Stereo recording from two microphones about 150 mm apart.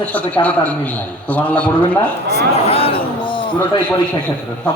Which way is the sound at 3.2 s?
35° left (ahead or behind).